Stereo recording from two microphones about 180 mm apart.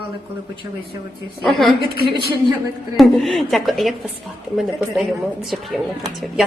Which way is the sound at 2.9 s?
Centre (ahead or behind).